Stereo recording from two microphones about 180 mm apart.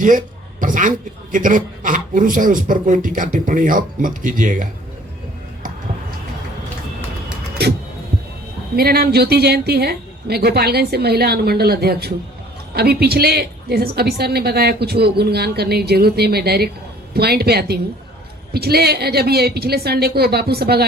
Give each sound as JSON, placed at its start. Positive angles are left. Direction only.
{"t": 0.0, "sound": "a man's voice", "side_deg": -45}
{"t": 8.7, "sound": "a woman's voice", "side_deg": -60}